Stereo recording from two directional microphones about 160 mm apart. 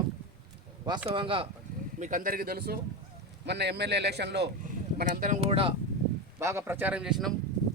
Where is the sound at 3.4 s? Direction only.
90° right.